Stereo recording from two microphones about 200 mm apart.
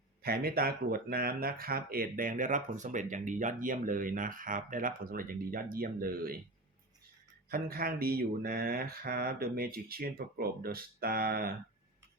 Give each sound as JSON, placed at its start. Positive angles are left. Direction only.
{"t": 0.2, "sound": "speech", "side_deg": -50}
{"t": 7.5, "sound": "speech", "side_deg": -50}